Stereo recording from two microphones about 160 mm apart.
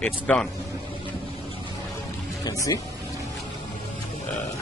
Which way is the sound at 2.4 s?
20° left (ahead or behind).